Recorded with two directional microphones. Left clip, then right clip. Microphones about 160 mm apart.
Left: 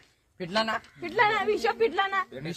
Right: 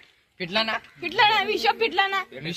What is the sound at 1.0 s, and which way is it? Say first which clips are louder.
A woman's voice: right 4 dB; 35° left (ahead or behind).